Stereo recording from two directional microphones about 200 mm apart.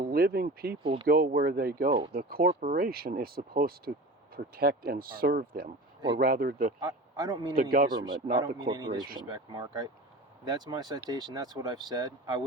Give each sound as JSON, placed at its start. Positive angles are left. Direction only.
{"t": 0.0, "sound": "speech", "side_deg": -50}
{"t": 0.8, "sound": "speech", "side_deg": -25}
{"t": 1.0, "sound": "speech", "side_deg": -50}
{"t": 6.7, "sound": "a man's voice", "side_deg": -20}
{"t": 7.5, "sound": "speech", "side_deg": -45}
{"t": 7.9, "sound": "speech", "side_deg": -20}